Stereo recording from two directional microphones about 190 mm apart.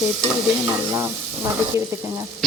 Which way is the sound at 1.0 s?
15° right (ahead or behind).